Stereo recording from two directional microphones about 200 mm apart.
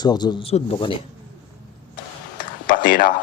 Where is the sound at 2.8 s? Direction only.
45° left (ahead or behind).